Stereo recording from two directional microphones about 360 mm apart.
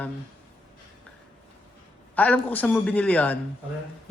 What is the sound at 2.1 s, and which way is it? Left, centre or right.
Speech, centre.